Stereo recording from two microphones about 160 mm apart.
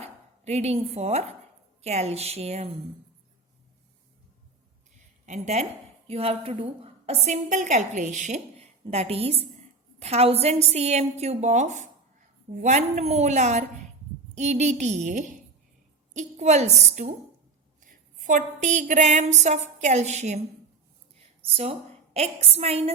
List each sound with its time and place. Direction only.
0.0 s a woman's voice: 40° right (ahead or behind)
5.2 s a woman's voice: 45° right (ahead or behind)
17.7 s a woman's voice: 55° right (ahead or behind)
21.4 s a woman's voice: 35° right (ahead or behind)